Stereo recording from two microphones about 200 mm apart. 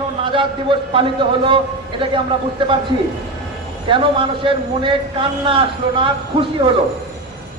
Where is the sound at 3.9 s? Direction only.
25° right (ahead or behind).